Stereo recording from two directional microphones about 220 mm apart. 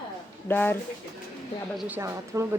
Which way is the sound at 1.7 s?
5° right (ahead or behind).